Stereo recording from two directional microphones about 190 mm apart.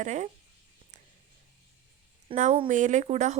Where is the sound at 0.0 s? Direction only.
40° right (ahead or behind).